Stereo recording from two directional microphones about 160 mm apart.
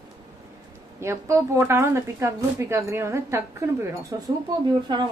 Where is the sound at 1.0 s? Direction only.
15° right (ahead or behind).